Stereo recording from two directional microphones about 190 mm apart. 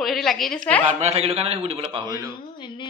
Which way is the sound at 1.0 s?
35° right (ahead or behind).